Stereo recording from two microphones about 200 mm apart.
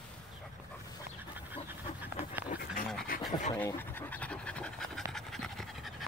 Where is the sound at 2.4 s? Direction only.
45° left (ahead or behind).